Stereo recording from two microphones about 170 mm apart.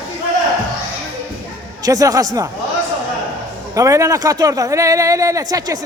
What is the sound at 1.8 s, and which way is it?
Speech, 20° right (ahead or behind).